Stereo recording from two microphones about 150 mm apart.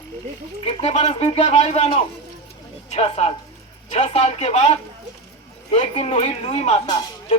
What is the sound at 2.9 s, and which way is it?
Speech, 45° left (ahead or behind).